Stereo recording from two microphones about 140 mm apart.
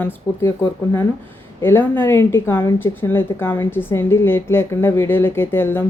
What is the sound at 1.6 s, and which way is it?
A woman's voice, 15° left (ahead or behind).